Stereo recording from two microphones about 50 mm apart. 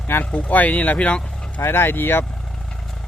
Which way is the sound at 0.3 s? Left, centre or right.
Left.